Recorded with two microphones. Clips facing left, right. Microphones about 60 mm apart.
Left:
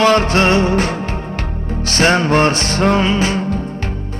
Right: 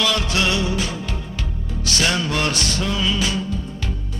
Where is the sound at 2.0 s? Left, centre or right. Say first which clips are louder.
Left 9 dB; left.